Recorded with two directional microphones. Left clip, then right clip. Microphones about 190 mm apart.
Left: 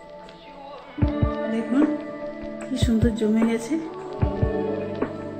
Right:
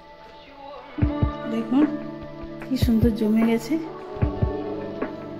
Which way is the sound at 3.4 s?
5° left (ahead or behind).